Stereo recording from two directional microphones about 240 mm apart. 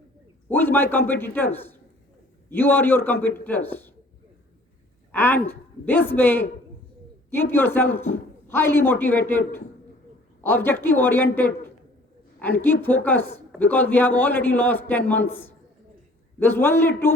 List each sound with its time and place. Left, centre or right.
0.4 s a man's voice: centre
5.1 s a man's voice: centre
7.5 s a man's voice: centre
10.4 s a man's voice: centre